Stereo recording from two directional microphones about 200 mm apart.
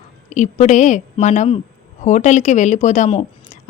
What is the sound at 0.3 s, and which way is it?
A woman's voice, 35° left (ahead or behind).